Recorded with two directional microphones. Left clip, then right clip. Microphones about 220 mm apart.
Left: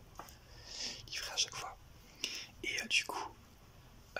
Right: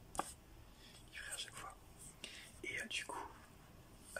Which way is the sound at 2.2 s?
5° left (ahead or behind).